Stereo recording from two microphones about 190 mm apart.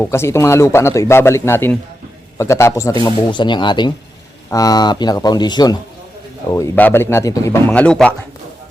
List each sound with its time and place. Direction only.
0.0 s speech: 15° left (ahead or behind)
7.7 s a man's voice: 5° left (ahead or behind)